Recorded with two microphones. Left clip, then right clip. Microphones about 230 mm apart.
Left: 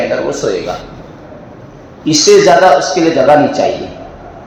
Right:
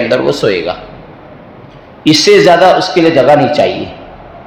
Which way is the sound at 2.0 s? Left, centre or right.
Right.